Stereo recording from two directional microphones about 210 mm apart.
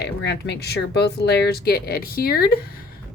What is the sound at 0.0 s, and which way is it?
A woman's voice, 55° left (ahead or behind).